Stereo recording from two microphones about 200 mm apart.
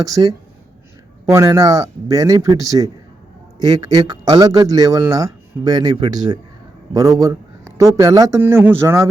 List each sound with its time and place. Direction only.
0.2 s speech: 20° right (ahead or behind)